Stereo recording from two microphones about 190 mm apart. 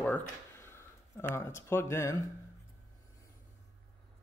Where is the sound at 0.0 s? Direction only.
5° left (ahead or behind).